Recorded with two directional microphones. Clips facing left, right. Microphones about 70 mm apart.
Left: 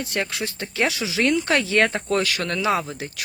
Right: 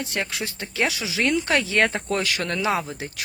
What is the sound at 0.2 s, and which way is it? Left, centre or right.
Speech, centre.